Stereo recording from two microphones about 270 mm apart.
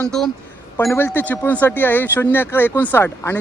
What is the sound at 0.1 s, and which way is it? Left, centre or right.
Speech, centre.